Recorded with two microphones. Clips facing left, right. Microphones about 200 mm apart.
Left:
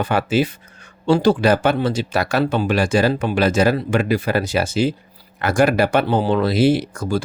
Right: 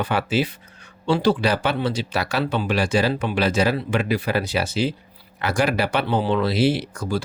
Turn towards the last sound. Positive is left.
turn(degrees=50)  # may be behind; listen again after turning